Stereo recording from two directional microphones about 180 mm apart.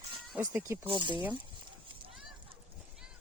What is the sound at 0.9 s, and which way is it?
Speech, 25° right (ahead or behind).